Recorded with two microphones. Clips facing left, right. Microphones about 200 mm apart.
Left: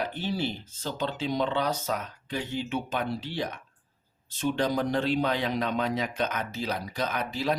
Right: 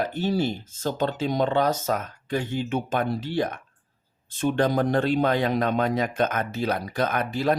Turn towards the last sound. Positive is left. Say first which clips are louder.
# right 5 dB
turn(degrees=-55)  # may be behind; listen again after turning